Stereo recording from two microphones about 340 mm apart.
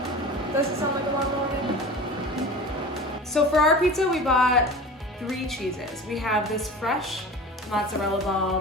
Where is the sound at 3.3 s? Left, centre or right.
Centre.